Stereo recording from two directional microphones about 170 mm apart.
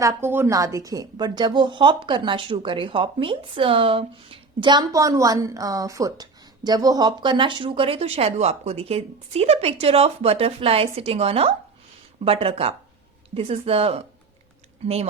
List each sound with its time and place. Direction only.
0.0 s a woman's voice: 15° right (ahead or behind); by 14.0 s 35° right (ahead or behind)